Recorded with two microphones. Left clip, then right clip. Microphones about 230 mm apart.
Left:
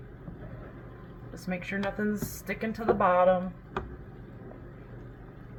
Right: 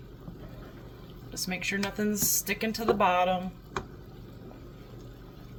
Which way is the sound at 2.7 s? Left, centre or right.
Right.